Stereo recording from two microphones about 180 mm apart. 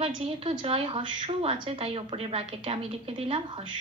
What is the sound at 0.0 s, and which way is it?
A woman's voice, 30° right (ahead or behind).